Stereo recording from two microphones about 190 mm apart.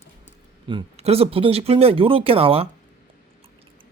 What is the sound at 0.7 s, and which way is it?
Speech, 30° right (ahead or behind).